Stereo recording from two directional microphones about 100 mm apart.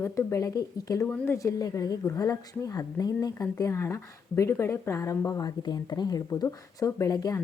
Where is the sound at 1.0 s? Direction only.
25° left (ahead or behind).